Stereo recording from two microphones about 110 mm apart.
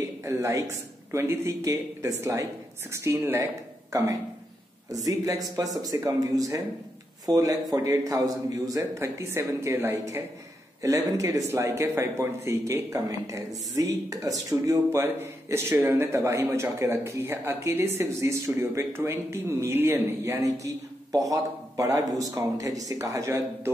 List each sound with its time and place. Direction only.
0.2 s speech: 25° right (ahead or behind)
20.4 s speech: 30° right (ahead or behind)